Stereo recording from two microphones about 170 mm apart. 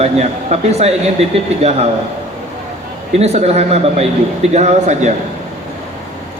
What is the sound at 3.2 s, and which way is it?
A man's voice, 40° right (ahead or behind).